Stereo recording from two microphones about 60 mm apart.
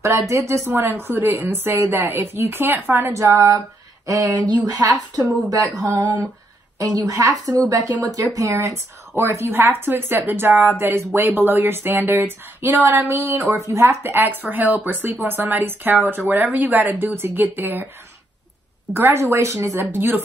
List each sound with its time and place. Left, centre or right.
0.3 s speech: right
0.7 s speech: right
3.1 s a sound: right
5.8 s a woman's voice: right
7.7 s a woman's voice: right
8.4 s speech: right
13.1 s speech: right
18.9 s speech: right
19.8 s speech: right